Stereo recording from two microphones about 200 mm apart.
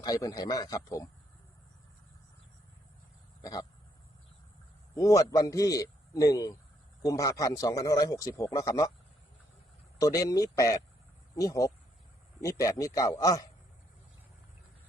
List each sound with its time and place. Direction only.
0.0 s speech: 20° left (ahead or behind)
3.4 s a sound: 20° left (ahead or behind)
4.9 s a man's voice: 15° left (ahead or behind)
10.0 s a man's voice: 15° left (ahead or behind)